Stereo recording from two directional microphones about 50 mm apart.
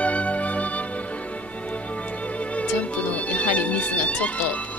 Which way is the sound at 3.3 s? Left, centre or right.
Left.